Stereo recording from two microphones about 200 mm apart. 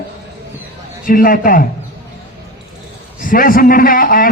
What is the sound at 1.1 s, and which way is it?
Speech, 45° left (ahead or behind).